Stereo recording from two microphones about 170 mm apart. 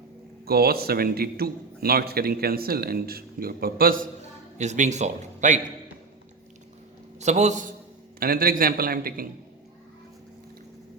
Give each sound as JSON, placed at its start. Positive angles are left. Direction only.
{"t": 0.4, "sound": "a man's voice", "side_deg": -65}
{"t": 7.2, "sound": "a man's voice", "side_deg": -40}
{"t": 8.2, "sound": "a man's voice", "side_deg": -60}